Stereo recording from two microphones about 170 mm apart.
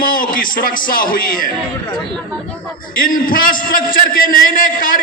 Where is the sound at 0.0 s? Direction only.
55° left (ahead or behind).